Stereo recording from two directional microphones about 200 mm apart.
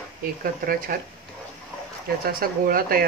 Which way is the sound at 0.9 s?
45° right (ahead or behind).